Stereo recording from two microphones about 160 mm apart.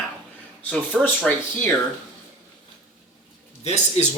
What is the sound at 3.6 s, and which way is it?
Speech, 45° left (ahead or behind).